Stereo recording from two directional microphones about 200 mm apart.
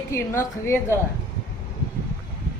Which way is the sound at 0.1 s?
15° left (ahead or behind).